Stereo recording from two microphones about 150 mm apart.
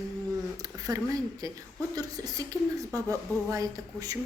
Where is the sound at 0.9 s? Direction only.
20° right (ahead or behind).